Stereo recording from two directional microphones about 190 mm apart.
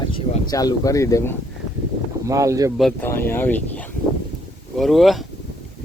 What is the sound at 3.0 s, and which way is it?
Speech, 10° left (ahead or behind).